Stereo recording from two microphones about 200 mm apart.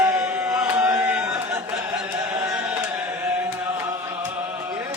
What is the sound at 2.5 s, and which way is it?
Chant, 5° right (ahead or behind).